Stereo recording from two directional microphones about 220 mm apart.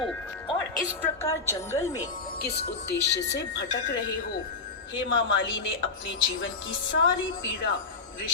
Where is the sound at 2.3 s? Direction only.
45° left (ahead or behind).